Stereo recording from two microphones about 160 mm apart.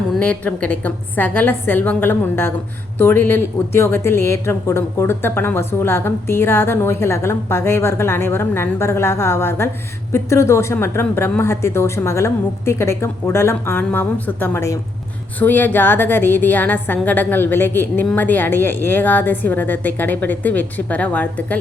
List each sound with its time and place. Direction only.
0.2 s a woman's voice: 10° left (ahead or behind)